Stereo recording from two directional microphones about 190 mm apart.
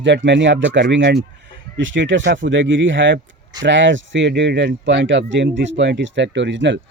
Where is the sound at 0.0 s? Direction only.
70° right (ahead or behind).